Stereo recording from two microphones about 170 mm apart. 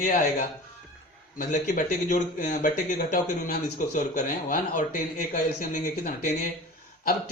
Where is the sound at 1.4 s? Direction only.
50° left (ahead or behind).